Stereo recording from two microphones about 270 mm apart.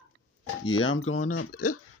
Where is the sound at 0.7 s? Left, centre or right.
Left.